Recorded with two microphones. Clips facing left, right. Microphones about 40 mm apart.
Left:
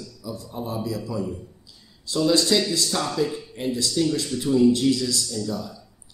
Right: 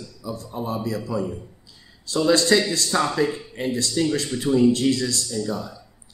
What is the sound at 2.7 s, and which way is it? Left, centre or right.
Speech, right.